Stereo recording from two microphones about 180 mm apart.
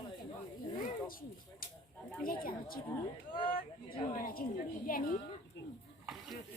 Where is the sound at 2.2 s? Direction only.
55° left (ahead or behind).